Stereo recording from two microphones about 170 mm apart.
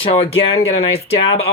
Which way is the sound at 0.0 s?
35° left (ahead or behind).